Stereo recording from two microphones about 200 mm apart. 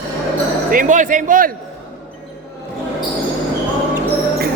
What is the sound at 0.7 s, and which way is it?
Speech, 40° right (ahead or behind).